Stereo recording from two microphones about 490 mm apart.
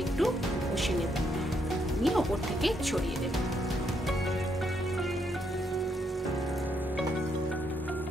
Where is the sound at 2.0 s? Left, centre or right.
Centre.